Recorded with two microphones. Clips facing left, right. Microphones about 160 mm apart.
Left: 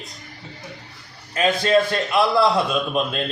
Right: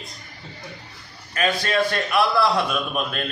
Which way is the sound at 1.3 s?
25° left (ahead or behind).